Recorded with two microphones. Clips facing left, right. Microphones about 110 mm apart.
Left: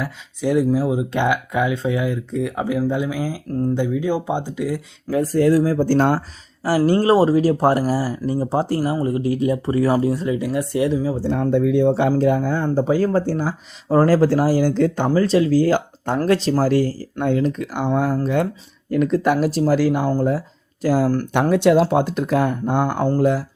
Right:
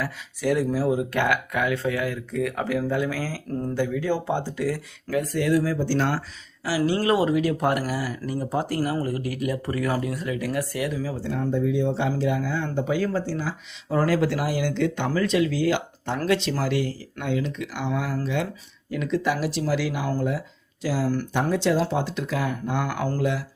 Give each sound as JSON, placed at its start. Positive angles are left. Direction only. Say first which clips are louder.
{"t": 0.0, "sound": "speech", "louder": "left 3 dB", "side_deg": 20}
{"t": 5.1, "sound": "speech", "louder": "left 6 dB", "side_deg": 35}
{"t": 7.0, "sound": "speech", "louder": "left 5 dB", "side_deg": 35}
{"t": 11.3, "sound": "speech", "louder": "left 6 dB", "side_deg": 70}
{"t": 12.1, "sound": "speech", "louder": "left 7 dB", "side_deg": 45}
{"t": 13.1, "sound": "speech", "louder": "left 7 dB", "side_deg": 45}
{"t": 20.8, "sound": "speech", "louder": "left 7 dB", "side_deg": 50}
{"t": 21.5, "sound": "speech", "louder": "left 8 dB", "side_deg": 60}